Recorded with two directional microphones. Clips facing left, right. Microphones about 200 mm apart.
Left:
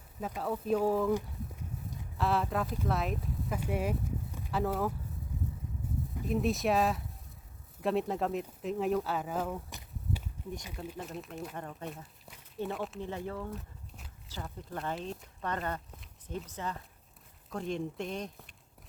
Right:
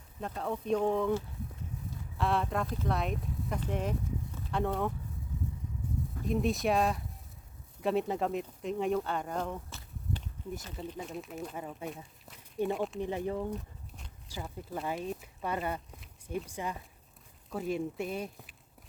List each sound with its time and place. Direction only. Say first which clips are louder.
0.2 s speech: left 1 dB; 5° left (ahead or behind)
2.1 s speech: even; centre (ahead or behind)
6.2 s speech: even; centre (ahead or behind)
9.6 s walk: left 1 dB; 15° left (ahead or behind)
10.8 s speech: right 1 dB; centre (ahead or behind)
13.0 s speech: right 4 dB; 15° right (ahead or behind)
13.5 s walk: right 4 dB; centre (ahead or behind)
14.4 s speech: right 1 dB; 5° right (ahead or behind)